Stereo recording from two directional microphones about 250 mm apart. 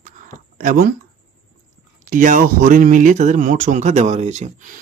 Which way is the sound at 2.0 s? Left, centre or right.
Right.